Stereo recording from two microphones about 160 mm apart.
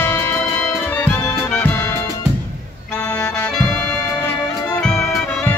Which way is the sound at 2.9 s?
20° left (ahead or behind).